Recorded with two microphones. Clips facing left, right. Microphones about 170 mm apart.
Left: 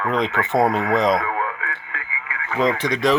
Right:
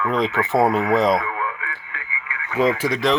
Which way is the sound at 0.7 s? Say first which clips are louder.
Right 1 dB; centre (ahead or behind).